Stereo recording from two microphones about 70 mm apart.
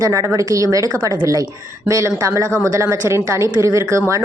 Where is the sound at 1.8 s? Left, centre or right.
Right.